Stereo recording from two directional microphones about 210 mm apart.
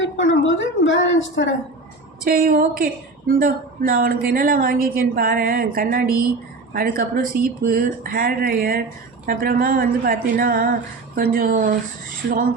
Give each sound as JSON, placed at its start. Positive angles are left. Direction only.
{"t": 0.0, "sound": "a woman's voice", "side_deg": 65}
{"t": 2.2, "sound": "a woman's voice", "side_deg": -45}